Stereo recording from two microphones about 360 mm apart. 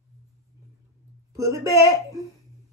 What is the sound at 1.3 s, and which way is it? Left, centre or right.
Speech, centre.